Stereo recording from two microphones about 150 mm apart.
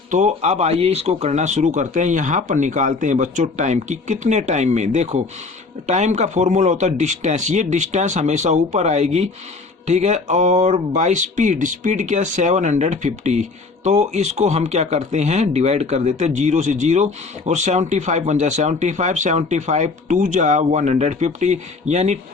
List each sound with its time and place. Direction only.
0.1 s speech: 50° right (ahead or behind)